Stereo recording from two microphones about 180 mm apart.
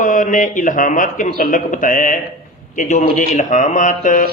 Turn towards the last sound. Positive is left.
turn(degrees=45)  # may be behind; listen again after turning